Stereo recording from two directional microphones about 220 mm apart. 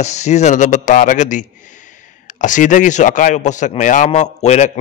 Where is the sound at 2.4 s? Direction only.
35° left (ahead or behind).